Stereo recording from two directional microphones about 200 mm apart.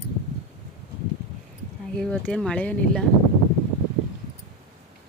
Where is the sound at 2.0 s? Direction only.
5° left (ahead or behind).